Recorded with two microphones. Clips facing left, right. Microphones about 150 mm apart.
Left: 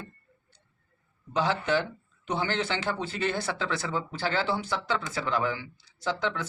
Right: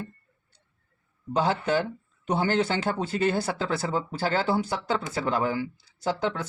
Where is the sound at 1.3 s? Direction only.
40° right (ahead or behind).